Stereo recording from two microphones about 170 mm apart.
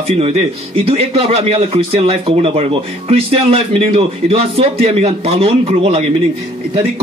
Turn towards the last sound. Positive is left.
turn(degrees=-35)  # may be behind; listen again after turning